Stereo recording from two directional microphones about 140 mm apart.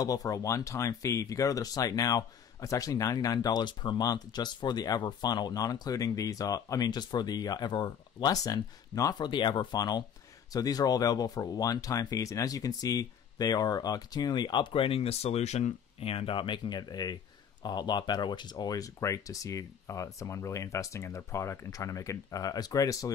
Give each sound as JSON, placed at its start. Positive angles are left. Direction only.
{"t": 0.0, "sound": "speech", "side_deg": 25}